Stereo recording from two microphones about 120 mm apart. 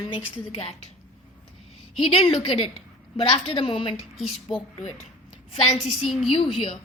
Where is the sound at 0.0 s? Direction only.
50° left (ahead or behind).